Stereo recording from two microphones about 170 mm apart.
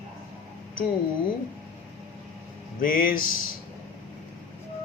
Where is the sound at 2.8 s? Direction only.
55° left (ahead or behind).